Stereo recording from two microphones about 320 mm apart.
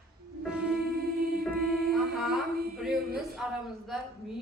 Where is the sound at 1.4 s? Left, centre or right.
Centre.